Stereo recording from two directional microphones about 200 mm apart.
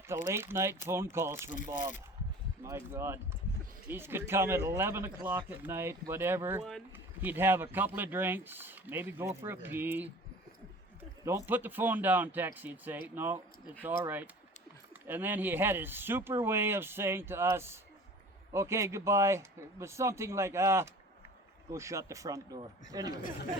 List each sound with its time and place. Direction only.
0.1 s speech: 10° right (ahead or behind)
1.5 s speech: 40° left (ahead or behind)
2.6 s speech: 15° right (ahead or behind)
11.4 s speech: 10° right (ahead or behind)
15.0 s speech: 10° right (ahead or behind)